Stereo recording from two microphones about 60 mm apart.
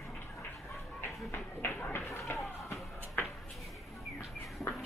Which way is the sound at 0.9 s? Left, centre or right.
Left.